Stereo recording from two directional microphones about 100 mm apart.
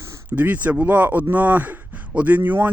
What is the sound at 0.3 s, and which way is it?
Speech, 15° right (ahead or behind).